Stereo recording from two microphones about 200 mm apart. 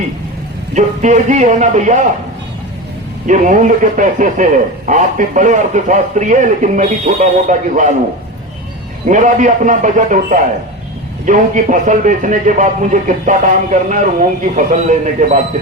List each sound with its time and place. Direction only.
0.7 s speech: 40° right (ahead or behind)
3.2 s speech: 40° right (ahead or behind)
9.0 s speech: 40° right (ahead or behind)